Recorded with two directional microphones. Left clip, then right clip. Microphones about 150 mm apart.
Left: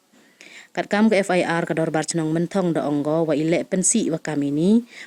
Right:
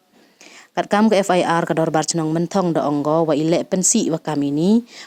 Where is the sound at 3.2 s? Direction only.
30° right (ahead or behind).